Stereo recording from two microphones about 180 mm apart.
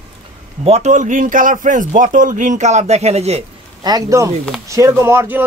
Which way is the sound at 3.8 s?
20° right (ahead or behind).